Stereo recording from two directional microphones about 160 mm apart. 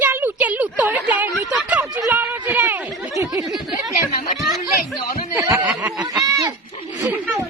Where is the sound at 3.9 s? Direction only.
60° left (ahead or behind).